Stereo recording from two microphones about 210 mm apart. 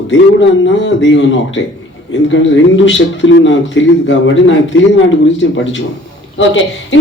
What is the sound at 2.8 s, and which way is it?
A woman's voice, 60° left (ahead or behind).